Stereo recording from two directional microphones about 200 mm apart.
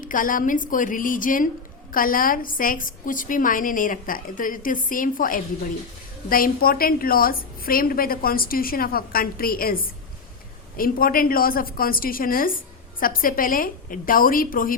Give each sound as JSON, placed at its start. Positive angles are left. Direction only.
{"t": 0.0, "sound": "a woman's voice", "side_deg": 40}